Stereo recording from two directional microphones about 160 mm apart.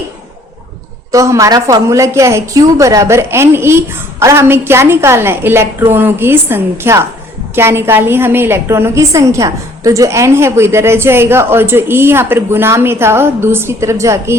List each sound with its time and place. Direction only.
1.1 s a woman's voice: 20° right (ahead or behind)